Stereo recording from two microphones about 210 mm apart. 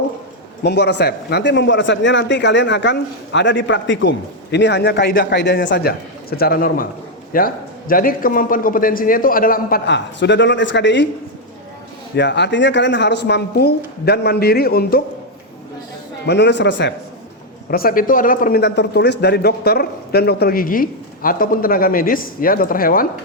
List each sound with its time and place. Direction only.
0.6 s a man's voice: 55° left (ahead or behind)
12.1 s a man's voice: 55° left (ahead or behind)
16.2 s a man's voice: 55° left (ahead or behind)
17.7 s a man's voice: 45° left (ahead or behind)